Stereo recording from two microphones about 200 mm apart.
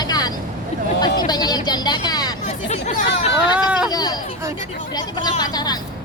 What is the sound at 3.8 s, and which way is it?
Speech, 20° left (ahead or behind).